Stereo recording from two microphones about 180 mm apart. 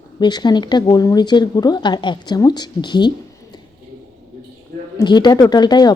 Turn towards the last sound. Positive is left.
turn(degrees=25)  # may be behind; listen again after turning